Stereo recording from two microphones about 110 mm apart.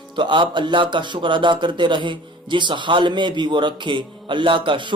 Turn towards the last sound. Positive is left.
turn(degrees=-50)  # may be behind; listen again after turning